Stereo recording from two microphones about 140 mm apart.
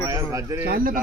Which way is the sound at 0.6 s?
90° right.